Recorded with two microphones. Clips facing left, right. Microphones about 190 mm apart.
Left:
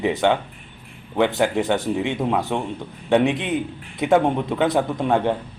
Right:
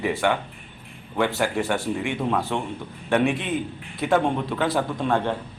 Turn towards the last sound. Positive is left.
turn(degrees=15)  # may be behind; listen again after turning